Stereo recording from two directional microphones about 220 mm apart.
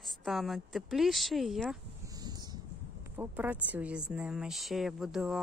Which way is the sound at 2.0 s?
15° right (ahead or behind).